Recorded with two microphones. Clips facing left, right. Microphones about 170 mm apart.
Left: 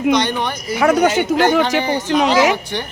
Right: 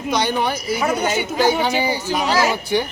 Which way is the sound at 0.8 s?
80° left.